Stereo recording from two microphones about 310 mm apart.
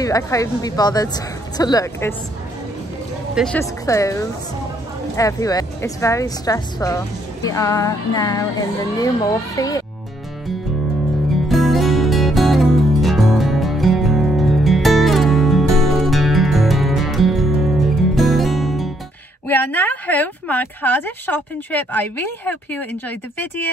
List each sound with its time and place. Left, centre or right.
0.0 s a woman's voice: centre
3.3 s a woman's voice: centre
11.4 s music: centre
19.4 s speech: centre